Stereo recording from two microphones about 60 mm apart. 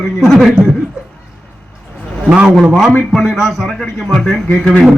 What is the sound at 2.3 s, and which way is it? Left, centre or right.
Speech, centre.